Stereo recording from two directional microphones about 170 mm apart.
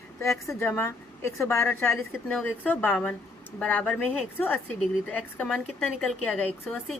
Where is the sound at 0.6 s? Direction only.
15° left (ahead or behind).